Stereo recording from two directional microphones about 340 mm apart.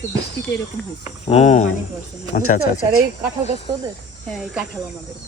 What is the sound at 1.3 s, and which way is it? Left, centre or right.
Speech, centre.